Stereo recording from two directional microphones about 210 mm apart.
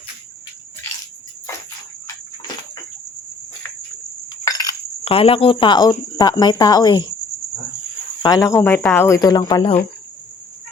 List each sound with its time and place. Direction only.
4.4 s a sound: 15° left (ahead or behind)
5.0 s speech: 25° left (ahead or behind)
8.2 s speech: 15° left (ahead or behind)